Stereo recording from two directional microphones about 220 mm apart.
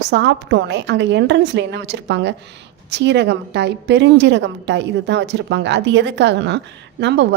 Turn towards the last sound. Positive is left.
turn(degrees=-55)  # may be behind; listen again after turning